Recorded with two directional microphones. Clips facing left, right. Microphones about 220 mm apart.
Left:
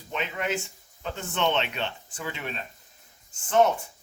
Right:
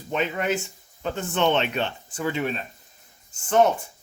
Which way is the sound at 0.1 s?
45° right (ahead or behind).